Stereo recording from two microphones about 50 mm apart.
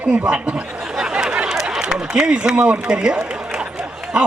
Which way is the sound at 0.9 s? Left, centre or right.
Centre.